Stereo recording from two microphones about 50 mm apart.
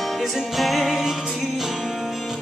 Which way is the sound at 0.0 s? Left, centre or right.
Centre.